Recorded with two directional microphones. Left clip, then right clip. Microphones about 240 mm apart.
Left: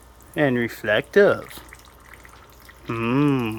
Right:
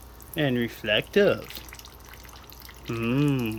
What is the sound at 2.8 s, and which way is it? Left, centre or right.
Speech, centre.